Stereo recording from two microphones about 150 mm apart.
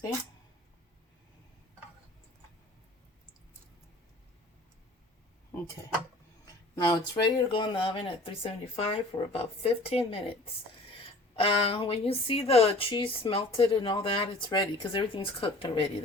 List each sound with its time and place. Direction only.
6.7 s speech: 30° left (ahead or behind)